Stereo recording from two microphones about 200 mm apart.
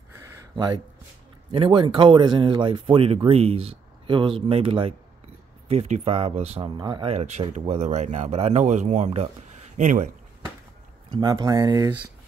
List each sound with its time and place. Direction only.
1.5 s speech: 25° right (ahead or behind); by 10.0 s 40° right (ahead or behind)
11.1 s speech: 20° right (ahead or behind)